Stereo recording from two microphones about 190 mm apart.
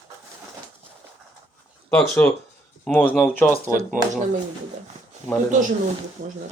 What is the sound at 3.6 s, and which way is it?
Speech, 45° right (ahead or behind).